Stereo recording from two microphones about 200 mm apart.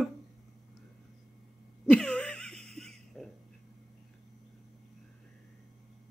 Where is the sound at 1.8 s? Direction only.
5° left (ahead or behind).